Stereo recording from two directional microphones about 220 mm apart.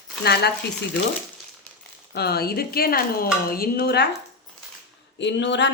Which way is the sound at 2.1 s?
45° left (ahead or behind).